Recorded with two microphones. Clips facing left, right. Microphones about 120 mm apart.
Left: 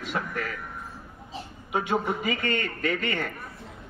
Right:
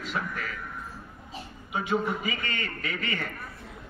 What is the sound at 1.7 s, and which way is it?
Speech, 70° left (ahead or behind).